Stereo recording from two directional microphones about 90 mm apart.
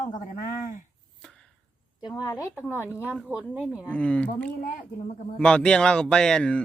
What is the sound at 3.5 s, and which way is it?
Speech, 15° right (ahead or behind).